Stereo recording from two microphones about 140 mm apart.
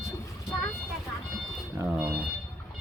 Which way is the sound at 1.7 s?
15° right (ahead or behind).